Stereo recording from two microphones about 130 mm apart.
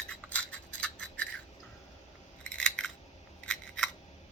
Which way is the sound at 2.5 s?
10° left (ahead or behind).